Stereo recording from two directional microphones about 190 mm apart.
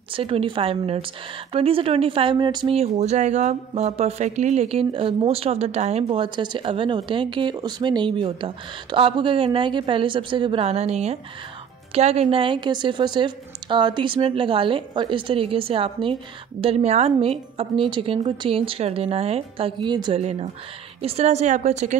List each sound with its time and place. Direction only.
0.1 s speech: 30° right (ahead or behind)
20.2 s a woman's voice: 35° right (ahead or behind)